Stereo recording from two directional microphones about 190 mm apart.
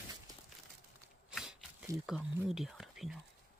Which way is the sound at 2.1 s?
Centre (ahead or behind).